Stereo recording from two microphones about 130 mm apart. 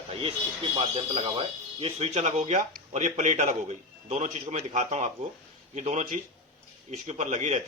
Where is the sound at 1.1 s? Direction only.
45° right (ahead or behind).